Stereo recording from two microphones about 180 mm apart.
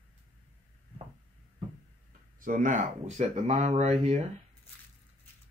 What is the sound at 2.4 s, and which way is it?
Speech, 45° right (ahead or behind).